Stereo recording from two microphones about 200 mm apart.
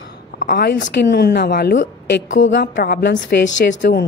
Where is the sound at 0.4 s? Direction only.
45° left (ahead or behind).